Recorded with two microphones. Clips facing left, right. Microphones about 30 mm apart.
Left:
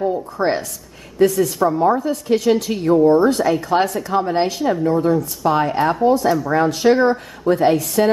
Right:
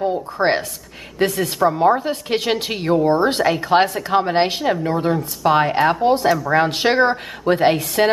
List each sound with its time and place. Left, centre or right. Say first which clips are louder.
0.4 s a woman's voice: right 3 dB; right